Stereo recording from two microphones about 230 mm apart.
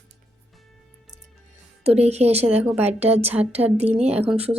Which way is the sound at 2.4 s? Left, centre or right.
Centre.